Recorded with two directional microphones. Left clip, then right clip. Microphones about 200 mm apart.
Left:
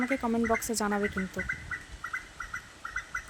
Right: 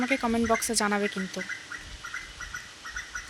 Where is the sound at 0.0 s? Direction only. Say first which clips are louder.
Right 3 dB; centre (ahead or behind).